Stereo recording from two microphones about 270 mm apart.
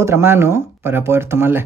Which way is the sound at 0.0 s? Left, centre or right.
Centre.